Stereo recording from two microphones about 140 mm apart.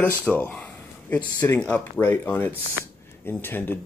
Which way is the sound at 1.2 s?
30° left (ahead or behind).